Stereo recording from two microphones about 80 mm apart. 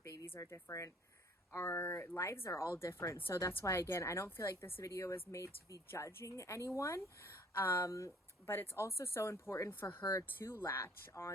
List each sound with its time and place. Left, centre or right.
0.3 s a woman's voice: left